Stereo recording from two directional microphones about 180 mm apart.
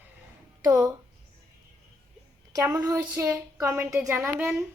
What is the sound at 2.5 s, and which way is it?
Speech, 20° right (ahead or behind).